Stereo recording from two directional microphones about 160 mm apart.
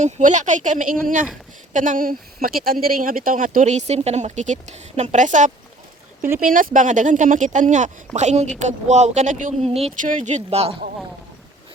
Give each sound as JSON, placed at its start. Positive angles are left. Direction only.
{"t": 0.0, "sound": "speech", "side_deg": -50}
{"t": 10.0, "sound": "speech", "side_deg": -50}